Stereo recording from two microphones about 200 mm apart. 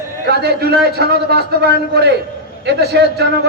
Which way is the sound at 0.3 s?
55° right (ahead or behind).